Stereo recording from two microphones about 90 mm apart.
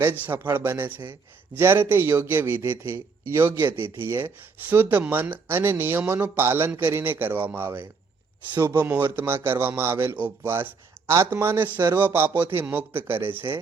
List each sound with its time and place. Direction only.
0.0 s speech: 25° right (ahead or behind)
3.8 s speech: 85° left
4.0 s speech: 25° right (ahead or behind)